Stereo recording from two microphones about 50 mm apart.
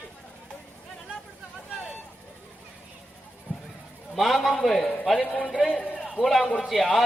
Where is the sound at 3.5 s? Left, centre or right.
Right.